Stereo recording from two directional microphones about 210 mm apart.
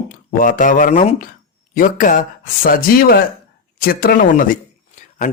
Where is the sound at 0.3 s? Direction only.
40° left (ahead or behind).